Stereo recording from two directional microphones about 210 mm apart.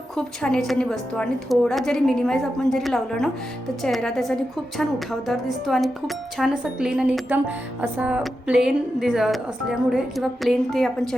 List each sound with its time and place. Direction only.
0.2 s a woman's voice: 5° left (ahead or behind)